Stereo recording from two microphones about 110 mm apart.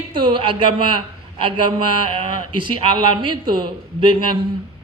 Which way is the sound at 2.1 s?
50° right (ahead or behind).